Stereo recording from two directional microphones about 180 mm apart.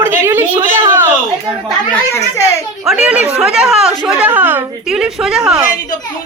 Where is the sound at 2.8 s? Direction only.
5° right (ahead or behind).